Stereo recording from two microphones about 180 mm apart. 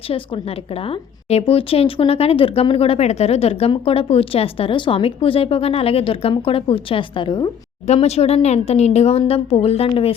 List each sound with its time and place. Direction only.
0.9 s a woman's voice: 35° left (ahead or behind)
7.9 s a woman's voice: 35° left (ahead or behind)